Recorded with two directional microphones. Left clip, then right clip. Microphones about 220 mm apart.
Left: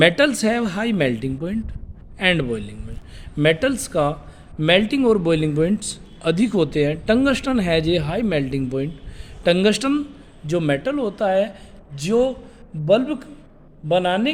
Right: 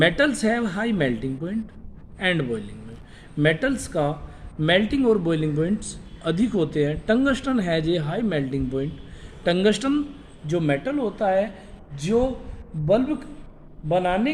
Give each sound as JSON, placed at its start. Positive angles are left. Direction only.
{"t": 0.0, "sound": "a man's voice", "side_deg": 45}